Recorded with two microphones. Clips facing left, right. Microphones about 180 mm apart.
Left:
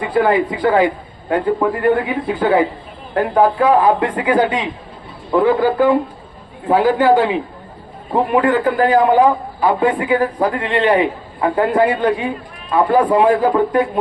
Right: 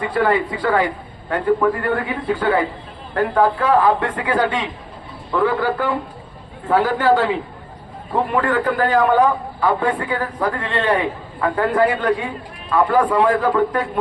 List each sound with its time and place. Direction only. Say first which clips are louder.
0.0 s a man's voice: left 3 dB; 20° left (ahead or behind)